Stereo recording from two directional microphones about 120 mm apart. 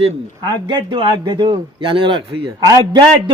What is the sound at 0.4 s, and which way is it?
A man's voice, 40° right (ahead or behind).